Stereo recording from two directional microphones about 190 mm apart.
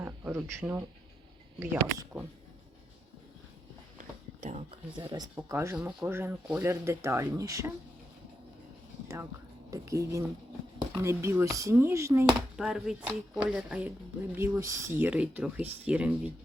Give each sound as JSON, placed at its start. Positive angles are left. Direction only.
{"t": 0.0, "sound": "a sound", "side_deg": -10}
{"t": 0.6, "sound": "speech", "side_deg": -15}
{"t": 4.4, "sound": "a sound", "side_deg": -35}
{"t": 4.9, "sound": "speech", "side_deg": -20}
{"t": 9.6, "sound": "speech", "side_deg": -15}
{"t": 12.5, "sound": "speech", "side_deg": -5}